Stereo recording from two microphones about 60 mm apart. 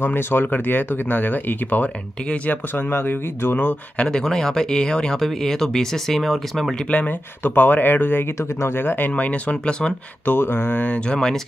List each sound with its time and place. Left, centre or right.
0.0 s speech: left
4.0 s speech: centre
6.9 s speech: left
9.1 s speech: left
10.2 s speech: left
11.1 s speech: centre